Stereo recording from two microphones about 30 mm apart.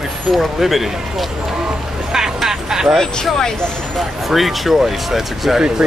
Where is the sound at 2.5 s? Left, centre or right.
Centre.